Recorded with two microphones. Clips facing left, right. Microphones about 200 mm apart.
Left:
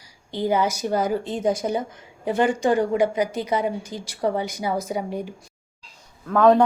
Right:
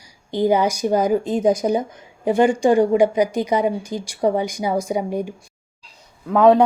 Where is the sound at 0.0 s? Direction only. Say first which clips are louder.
Right 6 dB; 15° right (ahead or behind).